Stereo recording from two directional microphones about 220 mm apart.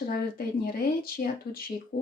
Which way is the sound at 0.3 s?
45° left (ahead or behind).